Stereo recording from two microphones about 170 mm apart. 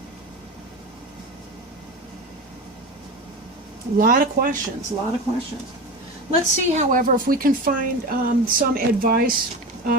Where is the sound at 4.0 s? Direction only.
55° right (ahead or behind).